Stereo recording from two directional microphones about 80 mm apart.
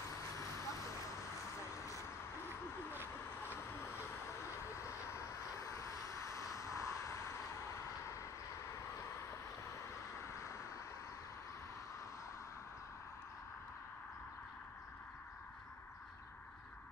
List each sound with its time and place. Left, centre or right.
0.1 s vehicle: left
3.4 s vehicle: left
10.3 s vehicle: left